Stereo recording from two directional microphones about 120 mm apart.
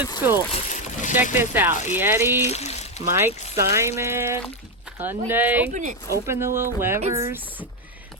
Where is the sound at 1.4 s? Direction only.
20° right (ahead or behind).